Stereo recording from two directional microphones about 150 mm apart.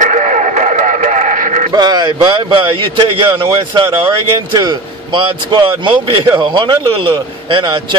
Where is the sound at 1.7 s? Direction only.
30° right (ahead or behind).